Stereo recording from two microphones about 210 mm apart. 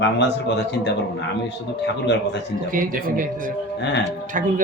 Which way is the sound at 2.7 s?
40° right (ahead or behind).